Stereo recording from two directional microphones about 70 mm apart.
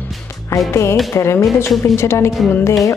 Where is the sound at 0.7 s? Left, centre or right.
Left.